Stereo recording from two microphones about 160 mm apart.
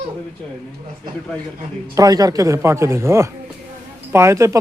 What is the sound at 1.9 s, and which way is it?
Speech, 20° right (ahead or behind).